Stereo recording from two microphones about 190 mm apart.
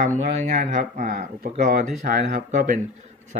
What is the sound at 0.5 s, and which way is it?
Speech, 50° right (ahead or behind).